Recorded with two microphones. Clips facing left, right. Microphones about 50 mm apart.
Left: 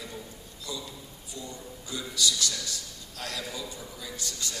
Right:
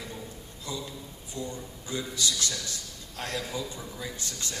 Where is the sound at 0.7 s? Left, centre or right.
Right.